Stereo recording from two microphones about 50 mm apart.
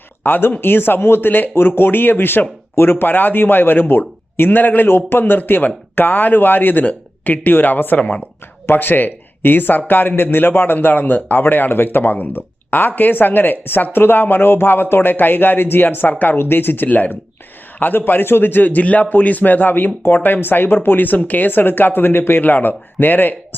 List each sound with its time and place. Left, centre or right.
0.2 s speech: left
4.9 s speech: left
5.2 s speech: left
8.6 s speech: left